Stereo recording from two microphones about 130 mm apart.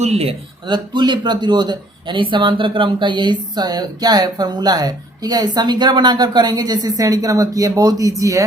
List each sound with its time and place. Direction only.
0.0 s speech: 50° right (ahead or behind)
0.7 s a man's voice: 35° right (ahead or behind)